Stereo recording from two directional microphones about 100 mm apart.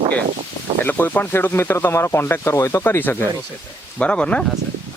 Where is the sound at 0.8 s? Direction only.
20° left (ahead or behind).